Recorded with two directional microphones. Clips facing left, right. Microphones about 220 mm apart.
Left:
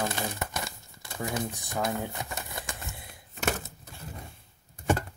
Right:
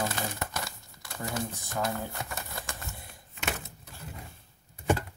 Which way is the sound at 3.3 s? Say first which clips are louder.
Left 5 dB; 40° left (ahead or behind).